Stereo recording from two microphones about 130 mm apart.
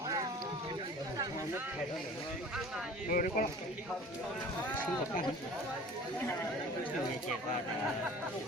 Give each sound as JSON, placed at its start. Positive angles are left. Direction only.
{"t": 3.1, "sound": "speech", "side_deg": 90}
{"t": 6.1, "sound": "speech", "side_deg": 15}